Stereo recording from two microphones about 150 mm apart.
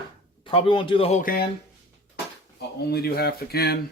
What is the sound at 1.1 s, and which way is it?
Speech, 65° left (ahead or behind).